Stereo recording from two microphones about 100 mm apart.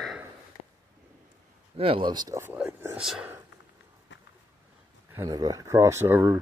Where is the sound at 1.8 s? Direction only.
65° right (ahead or behind).